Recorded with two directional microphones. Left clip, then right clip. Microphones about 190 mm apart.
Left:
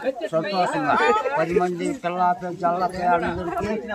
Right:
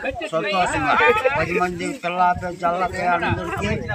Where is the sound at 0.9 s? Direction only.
75° left (ahead or behind).